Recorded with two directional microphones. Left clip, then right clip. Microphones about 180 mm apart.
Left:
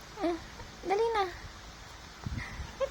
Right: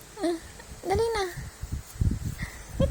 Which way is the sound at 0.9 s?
20° right (ahead or behind).